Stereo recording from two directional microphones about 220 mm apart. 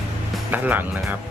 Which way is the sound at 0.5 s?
10° right (ahead or behind).